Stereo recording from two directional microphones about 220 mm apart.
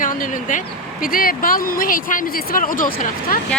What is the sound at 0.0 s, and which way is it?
Vehicle, 40° left (ahead or behind).